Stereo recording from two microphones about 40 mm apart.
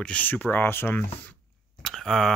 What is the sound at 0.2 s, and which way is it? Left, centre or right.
Speech, left.